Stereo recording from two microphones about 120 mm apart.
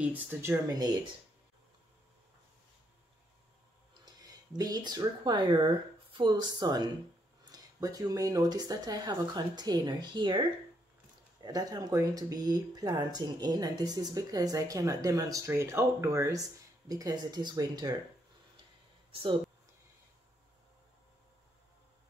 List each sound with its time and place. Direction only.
0.3 s speech: 20° right (ahead or behind)
4.0 s speech: 35° right (ahead or behind)
11.4 s speech: 30° right (ahead or behind)